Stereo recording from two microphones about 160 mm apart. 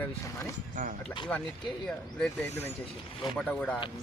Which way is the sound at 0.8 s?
55° right (ahead or behind).